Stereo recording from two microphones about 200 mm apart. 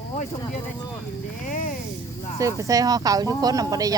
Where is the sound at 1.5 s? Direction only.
40° left (ahead or behind).